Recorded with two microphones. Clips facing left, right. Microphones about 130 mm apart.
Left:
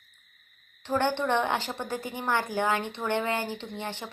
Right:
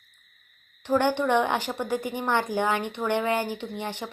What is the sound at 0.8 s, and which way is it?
A woman's voice, 15° right (ahead or behind).